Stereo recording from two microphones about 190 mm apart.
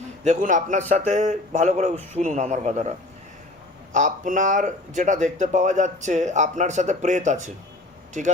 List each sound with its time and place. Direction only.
0.3 s speech: 40° right (ahead or behind)
3.9 s speech: 40° right (ahead or behind)